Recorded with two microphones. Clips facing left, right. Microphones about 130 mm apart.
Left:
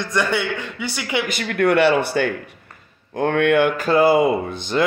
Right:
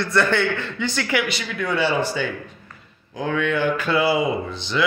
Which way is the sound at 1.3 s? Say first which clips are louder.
Left 7 dB; 55° left (ahead or behind).